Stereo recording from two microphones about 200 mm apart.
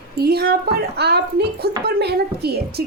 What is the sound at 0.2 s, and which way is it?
A woman's voice, 50° right (ahead or behind).